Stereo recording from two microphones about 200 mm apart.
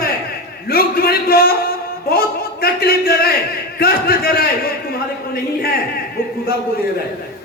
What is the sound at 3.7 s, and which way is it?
Speech, 50° left (ahead or behind).